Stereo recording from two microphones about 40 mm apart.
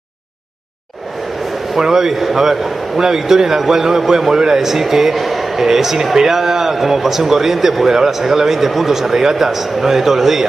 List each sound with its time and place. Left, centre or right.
1.8 s a man's voice: centre